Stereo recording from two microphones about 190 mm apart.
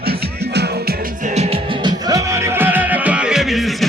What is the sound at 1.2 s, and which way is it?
Music, 35° right (ahead or behind).